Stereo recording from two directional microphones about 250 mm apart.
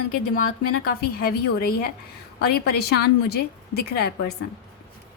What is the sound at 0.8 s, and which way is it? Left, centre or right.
A woman's voice, left.